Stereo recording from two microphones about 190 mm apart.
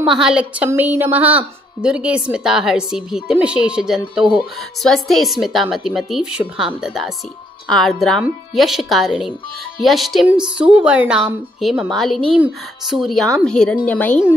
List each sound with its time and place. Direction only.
0.0 s a woman's voice: 5° right (ahead or behind)